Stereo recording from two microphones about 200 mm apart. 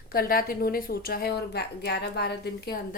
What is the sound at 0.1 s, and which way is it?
Speech, 45° left (ahead or behind).